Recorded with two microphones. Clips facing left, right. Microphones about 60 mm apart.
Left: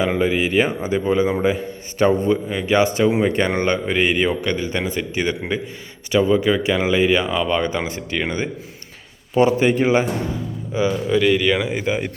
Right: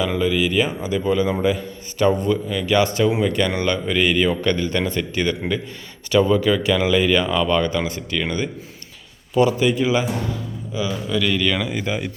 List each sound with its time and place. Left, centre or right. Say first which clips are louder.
0.0 s a man's voice: left 1 dB; left
4.4 s a man's voice: right 2 dB; centre; by 11.2 s left
11.2 s a man's voice: left 3 dB; centre